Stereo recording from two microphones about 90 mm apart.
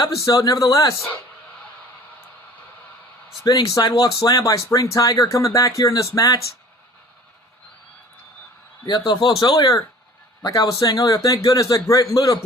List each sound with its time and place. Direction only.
0.0 s speech: 45° left (ahead or behind)
3.4 s speech: 45° left (ahead or behind)
8.9 s speech: 55° left (ahead or behind)